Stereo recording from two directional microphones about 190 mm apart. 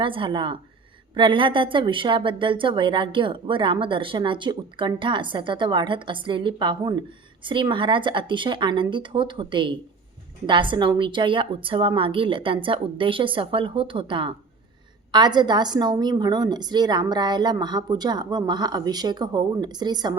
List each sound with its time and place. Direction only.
0.0 s a woman's voice: 25° right (ahead or behind)